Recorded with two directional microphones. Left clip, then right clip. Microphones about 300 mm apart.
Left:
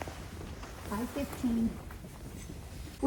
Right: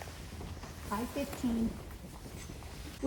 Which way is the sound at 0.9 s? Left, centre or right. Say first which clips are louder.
Right 1 dB; centre.